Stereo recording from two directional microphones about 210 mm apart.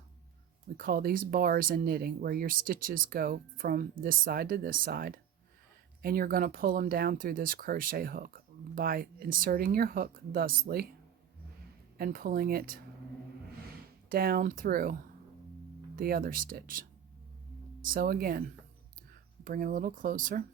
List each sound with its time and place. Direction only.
0.8 s speech: 45° right (ahead or behind)
11.9 s speech: 45° right (ahead or behind)
14.1 s speech: 45° right (ahead or behind)
16.0 s speech: 45° right (ahead or behind)
17.8 s speech: 45° right (ahead or behind)
19.5 s speech: 40° right (ahead or behind)